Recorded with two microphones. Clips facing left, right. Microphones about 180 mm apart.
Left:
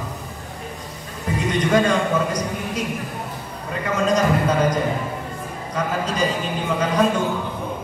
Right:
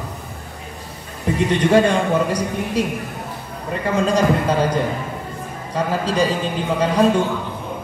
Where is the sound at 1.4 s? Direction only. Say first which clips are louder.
Right 3 dB; 30° right (ahead or behind).